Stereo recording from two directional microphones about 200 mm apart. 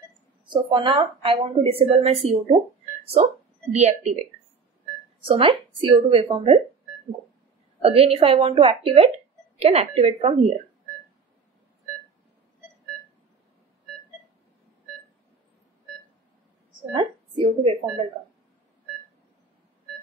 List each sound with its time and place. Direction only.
0.5 s a woman's voice: 25° right (ahead or behind)
3.7 s speech: 35° right (ahead or behind)
5.3 s a woman's voice: 25° right (ahead or behind)
7.8 s a woman's voice: 30° right (ahead or behind)
16.9 s speech: 25° right (ahead or behind)